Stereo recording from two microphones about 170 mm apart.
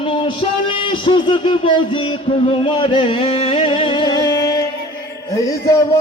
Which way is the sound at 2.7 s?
30° left (ahead or behind).